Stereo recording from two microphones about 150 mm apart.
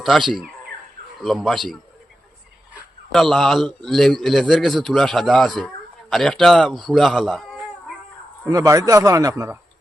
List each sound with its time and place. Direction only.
0.0 s a man's voice: centre (ahead or behind)
3.1 s a man's voice: centre (ahead or behind)
8.4 s a man's voice: 25° right (ahead or behind)